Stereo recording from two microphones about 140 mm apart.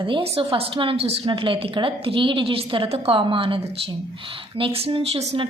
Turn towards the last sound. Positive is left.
turn(degrees=-40)  # may be behind; listen again after turning